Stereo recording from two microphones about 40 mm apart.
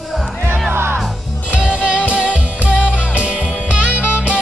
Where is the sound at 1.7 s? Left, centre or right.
Right.